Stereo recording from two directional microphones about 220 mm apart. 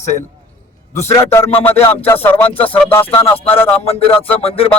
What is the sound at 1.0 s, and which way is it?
Speech, 10° left (ahead or behind).